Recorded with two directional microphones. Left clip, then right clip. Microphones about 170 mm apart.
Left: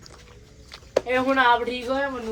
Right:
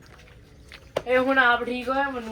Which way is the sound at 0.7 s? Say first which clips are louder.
Even; 30° left (ahead or behind).